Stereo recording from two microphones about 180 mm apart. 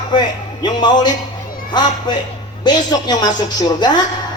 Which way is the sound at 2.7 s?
25° left (ahead or behind).